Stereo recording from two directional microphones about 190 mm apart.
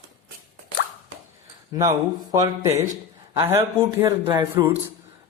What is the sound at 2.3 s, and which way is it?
A man's voice, 15° right (ahead or behind).